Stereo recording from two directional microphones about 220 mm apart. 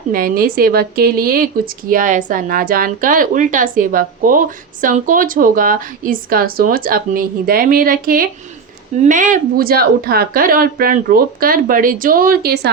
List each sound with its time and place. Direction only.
0.1 s speech: 40° right (ahead or behind)